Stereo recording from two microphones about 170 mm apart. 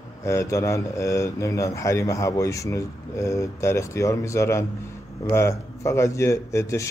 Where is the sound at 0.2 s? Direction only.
15° left (ahead or behind).